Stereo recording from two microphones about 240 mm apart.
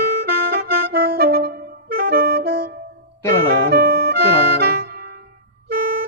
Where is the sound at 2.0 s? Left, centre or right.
Right.